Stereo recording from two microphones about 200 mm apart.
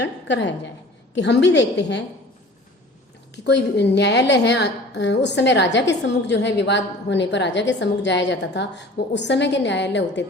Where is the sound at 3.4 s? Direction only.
60° left (ahead or behind).